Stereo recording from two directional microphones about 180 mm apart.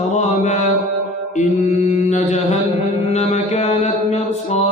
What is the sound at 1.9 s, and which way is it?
Mantra, 40° left (ahead or behind).